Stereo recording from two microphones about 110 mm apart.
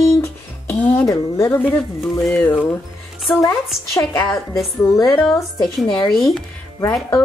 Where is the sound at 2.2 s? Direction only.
10° left (ahead or behind).